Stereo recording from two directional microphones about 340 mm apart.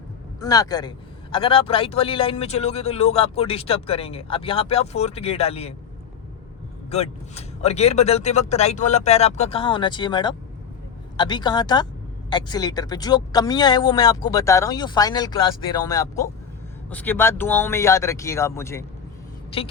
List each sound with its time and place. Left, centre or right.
0.3 s a man's voice: centre
6.9 s a man's voice: centre